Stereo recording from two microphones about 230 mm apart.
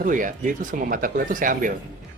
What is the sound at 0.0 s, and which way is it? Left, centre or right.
Speech, right.